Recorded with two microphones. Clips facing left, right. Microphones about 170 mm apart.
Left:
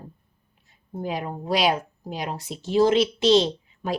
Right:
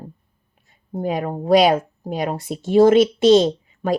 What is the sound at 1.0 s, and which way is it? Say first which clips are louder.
Speech: right 6 dB; 50° right (ahead or behind).